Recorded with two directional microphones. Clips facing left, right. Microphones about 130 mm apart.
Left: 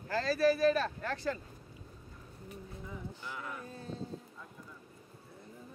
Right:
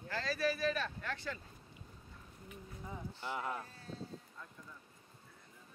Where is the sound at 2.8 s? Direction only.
25° right (ahead or behind).